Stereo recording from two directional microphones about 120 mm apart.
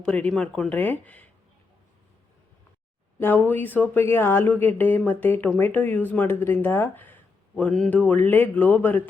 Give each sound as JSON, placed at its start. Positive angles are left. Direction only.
{"t": 0.1, "sound": "speech", "side_deg": 10}
{"t": 3.2, "sound": "speech", "side_deg": 15}